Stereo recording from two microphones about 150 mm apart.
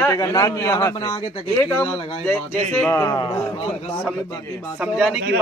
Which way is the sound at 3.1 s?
30° left (ahead or behind).